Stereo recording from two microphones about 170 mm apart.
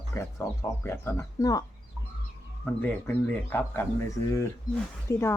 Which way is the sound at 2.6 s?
10° left (ahead or behind).